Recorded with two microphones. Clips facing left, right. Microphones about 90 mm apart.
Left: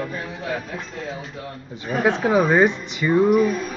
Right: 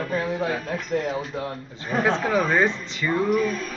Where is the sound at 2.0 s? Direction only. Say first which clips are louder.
Left 5 dB; 15° left (ahead or behind).